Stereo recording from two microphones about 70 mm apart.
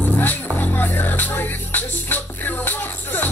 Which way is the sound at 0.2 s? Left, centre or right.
Left.